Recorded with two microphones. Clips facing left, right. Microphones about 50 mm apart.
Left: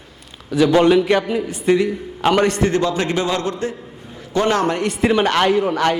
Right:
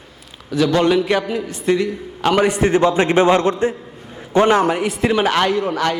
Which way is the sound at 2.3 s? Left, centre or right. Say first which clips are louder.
Right 3 dB; centre.